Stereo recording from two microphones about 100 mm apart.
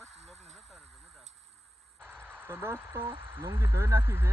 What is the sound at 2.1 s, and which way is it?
Speech, 20° right (ahead or behind).